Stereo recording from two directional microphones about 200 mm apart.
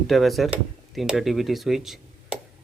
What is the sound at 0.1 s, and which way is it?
A man's voice, centre (ahead or behind).